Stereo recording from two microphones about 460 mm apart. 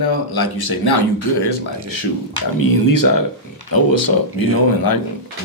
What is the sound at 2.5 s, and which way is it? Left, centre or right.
Speech, left.